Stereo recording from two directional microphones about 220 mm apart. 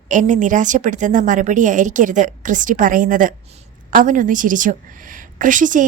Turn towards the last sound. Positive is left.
turn(degrees=-35)  # may be behind; listen again after turning